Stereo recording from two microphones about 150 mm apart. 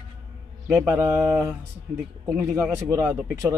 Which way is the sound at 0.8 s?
10° right (ahead or behind).